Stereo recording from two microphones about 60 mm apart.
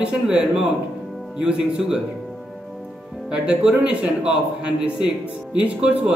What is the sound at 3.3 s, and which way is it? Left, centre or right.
A man's voice, centre.